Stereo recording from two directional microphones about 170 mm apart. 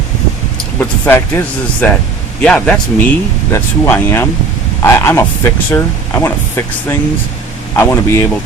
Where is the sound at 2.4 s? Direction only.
5° left (ahead or behind).